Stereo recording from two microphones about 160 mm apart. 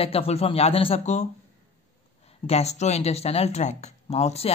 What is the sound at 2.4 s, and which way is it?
Speech, 40° left (ahead or behind).